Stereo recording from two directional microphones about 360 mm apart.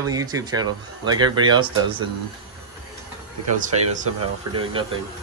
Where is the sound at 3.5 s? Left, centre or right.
Right.